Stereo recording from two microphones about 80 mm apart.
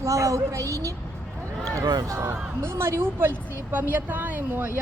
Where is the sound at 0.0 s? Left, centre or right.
Right.